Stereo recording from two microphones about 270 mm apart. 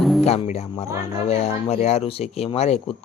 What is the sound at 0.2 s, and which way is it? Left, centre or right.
Speech, left.